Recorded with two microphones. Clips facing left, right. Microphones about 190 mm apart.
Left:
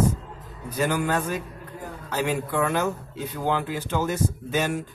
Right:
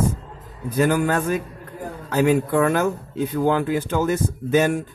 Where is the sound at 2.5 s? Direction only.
50° right (ahead or behind).